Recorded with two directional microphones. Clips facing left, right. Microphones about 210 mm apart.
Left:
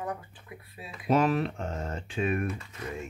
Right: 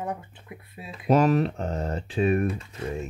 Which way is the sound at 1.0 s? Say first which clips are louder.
Right 4 dB; 40° right (ahead or behind).